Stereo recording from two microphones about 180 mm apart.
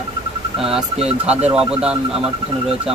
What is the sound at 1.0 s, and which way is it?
Speech, 5° right (ahead or behind).